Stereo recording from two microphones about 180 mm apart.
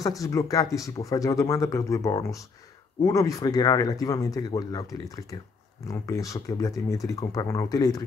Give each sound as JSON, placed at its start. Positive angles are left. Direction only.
{"t": 0.0, "sound": "speech", "side_deg": 20}